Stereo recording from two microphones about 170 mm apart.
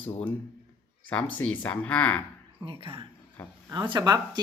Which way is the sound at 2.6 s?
35° right (ahead or behind).